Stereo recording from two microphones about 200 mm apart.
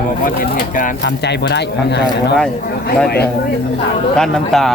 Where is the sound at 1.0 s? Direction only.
60° left (ahead or behind).